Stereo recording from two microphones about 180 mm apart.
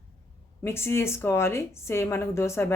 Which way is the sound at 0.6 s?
15° left (ahead or behind).